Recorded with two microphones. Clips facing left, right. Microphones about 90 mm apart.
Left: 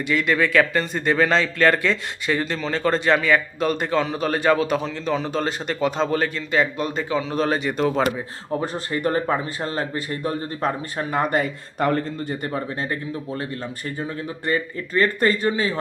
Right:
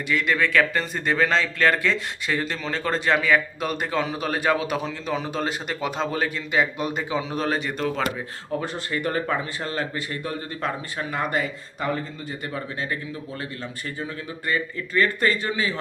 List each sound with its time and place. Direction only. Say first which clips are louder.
0.1 s speech: left 2 dB; centre (ahead or behind)
7.4 s speech: left 3 dB; centre (ahead or behind)
8.6 s a man's voice: left 5 dB; 40° left (ahead or behind)
11.8 s a man's voice: left 6 dB; 55° left (ahead or behind); by 15.8 s 30° left (ahead or behind)